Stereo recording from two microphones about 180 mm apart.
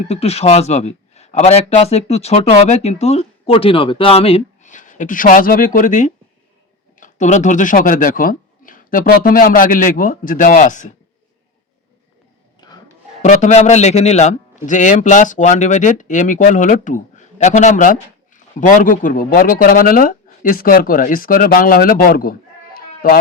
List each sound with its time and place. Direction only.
0.1 s a man's voice: 35° left (ahead or behind)
12.5 s a sound: 25° left (ahead or behind)
13.2 s a man's voice: 40° left (ahead or behind)